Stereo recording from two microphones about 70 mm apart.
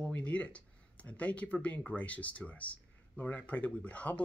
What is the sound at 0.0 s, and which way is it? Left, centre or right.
Speech, left.